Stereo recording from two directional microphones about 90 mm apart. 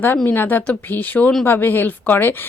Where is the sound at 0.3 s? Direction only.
20° left (ahead or behind).